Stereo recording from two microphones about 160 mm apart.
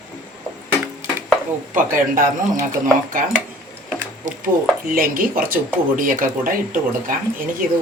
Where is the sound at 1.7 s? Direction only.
55° right (ahead or behind).